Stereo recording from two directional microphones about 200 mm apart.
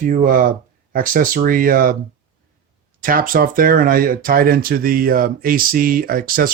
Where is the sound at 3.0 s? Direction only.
45° right (ahead or behind).